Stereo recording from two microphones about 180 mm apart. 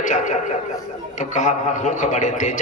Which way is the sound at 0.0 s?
45° left (ahead or behind).